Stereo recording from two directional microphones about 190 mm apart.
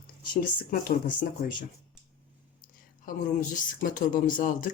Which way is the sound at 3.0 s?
45° left (ahead or behind).